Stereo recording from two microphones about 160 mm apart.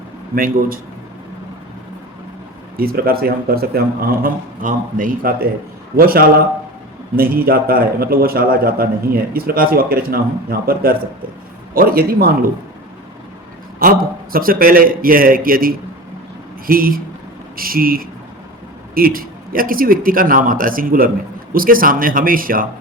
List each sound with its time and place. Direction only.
0.3 s speech: 60° right (ahead or behind)
2.7 s speech: 70° right (ahead or behind)
13.7 s a man's voice: 65° right (ahead or behind)